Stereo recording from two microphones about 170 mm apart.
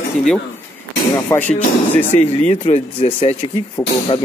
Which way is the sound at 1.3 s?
15° left (ahead or behind).